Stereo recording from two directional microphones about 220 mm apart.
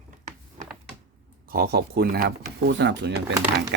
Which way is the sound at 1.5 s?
45° right (ahead or behind).